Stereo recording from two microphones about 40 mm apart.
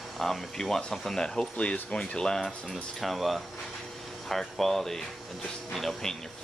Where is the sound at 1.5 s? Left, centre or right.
Left.